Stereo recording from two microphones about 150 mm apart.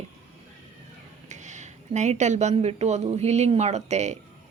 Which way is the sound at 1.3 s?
50° right (ahead or behind).